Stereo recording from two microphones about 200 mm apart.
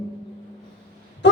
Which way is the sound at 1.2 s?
60° left (ahead or behind).